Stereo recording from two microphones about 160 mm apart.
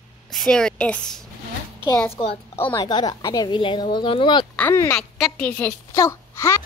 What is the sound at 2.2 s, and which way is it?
Speech, 30° left (ahead or behind).